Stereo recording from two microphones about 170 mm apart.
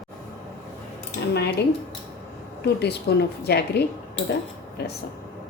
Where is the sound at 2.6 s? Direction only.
75° left (ahead or behind).